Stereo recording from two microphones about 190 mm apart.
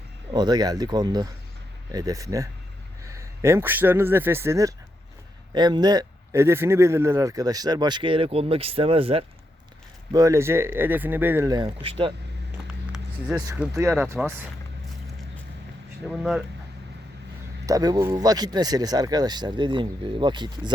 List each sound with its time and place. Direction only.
0.3 s speech: 20° right (ahead or behind)
10.1 s speech: 15° right (ahead or behind)
12.9 s vehicle: 5° right (ahead or behind)
13.6 s speech: 10° right (ahead or behind)
16.0 s speech: centre (ahead or behind)
17.7 s speech: 20° right (ahead or behind)